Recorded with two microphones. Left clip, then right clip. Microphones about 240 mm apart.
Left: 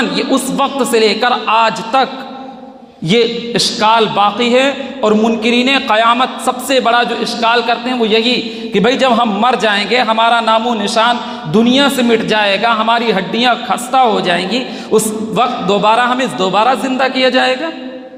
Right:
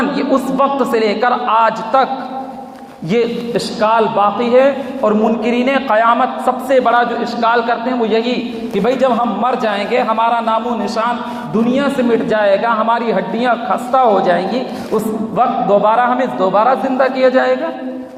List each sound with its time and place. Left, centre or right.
0.0 s a man's voice: left
3.1 s a man's voice: left